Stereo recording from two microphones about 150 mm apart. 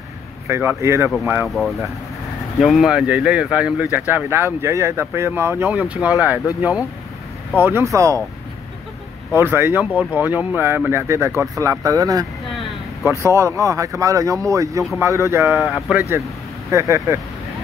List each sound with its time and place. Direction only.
0.5 s speech: 15° right (ahead or behind)
1.5 s speech: centre (ahead or behind)
7.5 s speech: 15° right (ahead or behind)
9.3 s speech: 15° right (ahead or behind)
15.9 s speech: 5° right (ahead or behind)
16.7 s speech: 20° right (ahead or behind)